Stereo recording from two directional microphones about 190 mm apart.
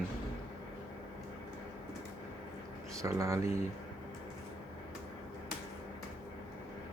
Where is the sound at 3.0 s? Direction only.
15° right (ahead or behind).